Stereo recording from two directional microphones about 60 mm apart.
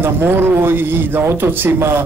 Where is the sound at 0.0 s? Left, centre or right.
Right.